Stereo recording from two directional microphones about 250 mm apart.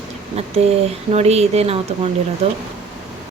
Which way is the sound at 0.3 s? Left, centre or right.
Right.